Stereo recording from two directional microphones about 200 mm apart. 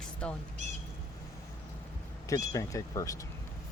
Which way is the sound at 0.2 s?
5° left (ahead or behind).